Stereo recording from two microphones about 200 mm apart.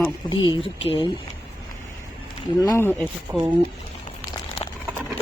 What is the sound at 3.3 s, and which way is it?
Speech, 20° right (ahead or behind).